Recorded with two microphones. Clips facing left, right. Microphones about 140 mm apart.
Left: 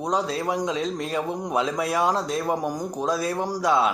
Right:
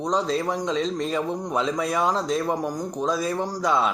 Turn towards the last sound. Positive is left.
turn(degrees=5)  # may be behind; listen again after turning